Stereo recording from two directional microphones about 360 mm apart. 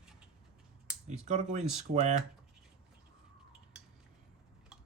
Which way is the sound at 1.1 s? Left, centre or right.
Centre.